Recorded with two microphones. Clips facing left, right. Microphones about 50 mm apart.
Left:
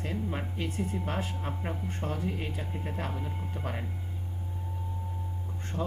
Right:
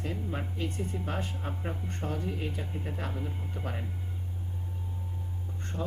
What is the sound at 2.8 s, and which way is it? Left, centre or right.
Speech, centre.